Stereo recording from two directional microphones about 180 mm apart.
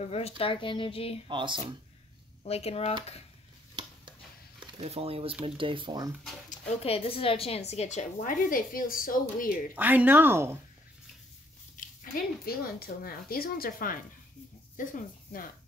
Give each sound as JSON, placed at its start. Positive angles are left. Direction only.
{"t": 0.0, "sound": "a woman's voice", "side_deg": 35}
{"t": 1.3, "sound": "speech", "side_deg": -25}
{"t": 2.4, "sound": "a woman's voice", "side_deg": 35}
{"t": 4.6, "sound": "speech", "side_deg": -35}
{"t": 6.8, "sound": "a woman's voice", "side_deg": 35}
{"t": 9.8, "sound": "speech", "side_deg": -10}
{"t": 11.7, "sound": "speech", "side_deg": 50}